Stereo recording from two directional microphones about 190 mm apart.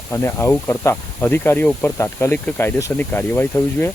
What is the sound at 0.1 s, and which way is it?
Speech, 15° left (ahead or behind).